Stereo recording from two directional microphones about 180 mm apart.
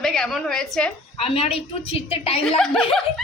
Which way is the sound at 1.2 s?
35° left (ahead or behind).